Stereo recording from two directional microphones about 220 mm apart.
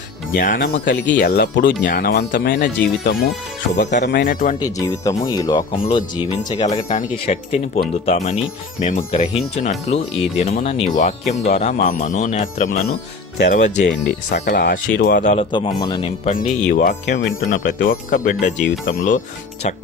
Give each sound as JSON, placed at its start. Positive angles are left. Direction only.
{"t": 0.3, "sound": "speech", "side_deg": 40}
{"t": 0.9, "sound": "speech", "side_deg": 55}
{"t": 5.2, "sound": "speech", "side_deg": 20}
{"t": 13.9, "sound": "speech", "side_deg": 50}
{"t": 14.4, "sound": "speech", "side_deg": 40}
{"t": 15.5, "sound": "speech", "side_deg": 20}
{"t": 16.3, "sound": "speech", "side_deg": 35}